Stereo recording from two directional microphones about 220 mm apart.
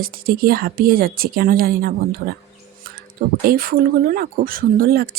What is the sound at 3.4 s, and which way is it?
Speech, 40° right (ahead or behind).